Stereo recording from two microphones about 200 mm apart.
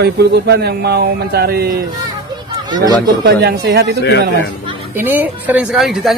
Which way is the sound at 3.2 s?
55° right (ahead or behind).